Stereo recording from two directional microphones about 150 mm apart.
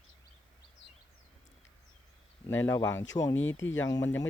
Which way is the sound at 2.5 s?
15° left (ahead or behind).